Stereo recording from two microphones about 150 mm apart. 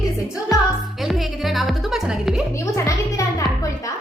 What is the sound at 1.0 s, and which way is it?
Speech, centre (ahead or behind).